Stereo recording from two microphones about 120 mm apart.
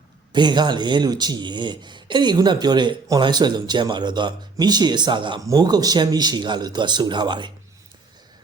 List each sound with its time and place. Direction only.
0.3 s speech: 40° right (ahead or behind)
5.4 s speech: 30° right (ahead or behind)